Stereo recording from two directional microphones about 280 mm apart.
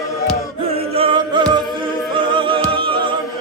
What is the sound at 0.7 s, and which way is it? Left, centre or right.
Music, centre.